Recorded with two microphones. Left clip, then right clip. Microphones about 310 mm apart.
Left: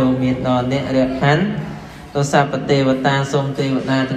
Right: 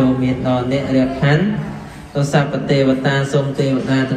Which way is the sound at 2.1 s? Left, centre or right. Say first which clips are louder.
Left 2 dB; left.